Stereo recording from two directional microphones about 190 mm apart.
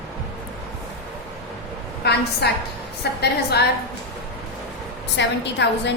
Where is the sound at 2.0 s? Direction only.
60° left (ahead or behind).